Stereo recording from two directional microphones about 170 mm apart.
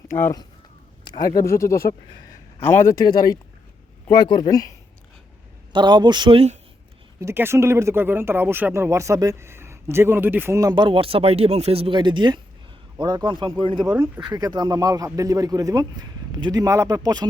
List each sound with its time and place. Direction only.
0.1 s speech: 15° left (ahead or behind)
1.0 s a man's voice: 25° left (ahead or behind)
1.8 s speech: 55° left (ahead or behind)
2.6 s speech: 15° left (ahead or behind)
5.7 s speech: 25° right (ahead or behind)
7.2 s speech: 15° right (ahead or behind)
13.7 s speech: 5° right (ahead or behind)
14.2 s speech: 25° right (ahead or behind)